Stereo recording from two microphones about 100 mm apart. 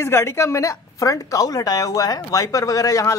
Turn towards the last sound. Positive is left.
turn(degrees=35)  # may be behind; listen again after turning